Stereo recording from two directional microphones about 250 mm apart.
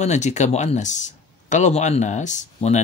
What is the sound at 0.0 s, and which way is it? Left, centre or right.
Speech, left.